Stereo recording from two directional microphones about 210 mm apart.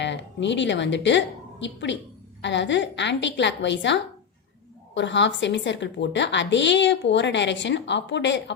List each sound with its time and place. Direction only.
0.0 s a woman's voice: 60° left (ahead or behind)
4.9 s a woman's voice: 60° left (ahead or behind)